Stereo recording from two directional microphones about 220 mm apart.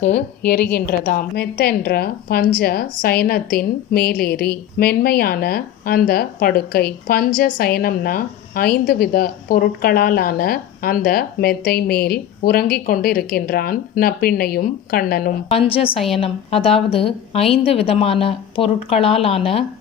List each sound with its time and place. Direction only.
0.2 s a woman's voice: 50° left (ahead or behind)
15.5 s a woman's voice: 25° left (ahead or behind)